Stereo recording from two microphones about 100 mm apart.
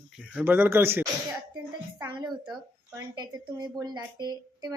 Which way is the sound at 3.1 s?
40° right (ahead or behind).